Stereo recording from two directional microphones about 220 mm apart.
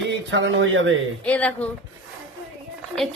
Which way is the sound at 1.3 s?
5° left (ahead or behind).